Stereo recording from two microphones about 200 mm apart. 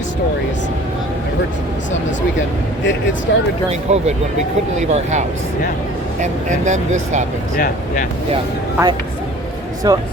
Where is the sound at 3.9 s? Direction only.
35° right (ahead or behind).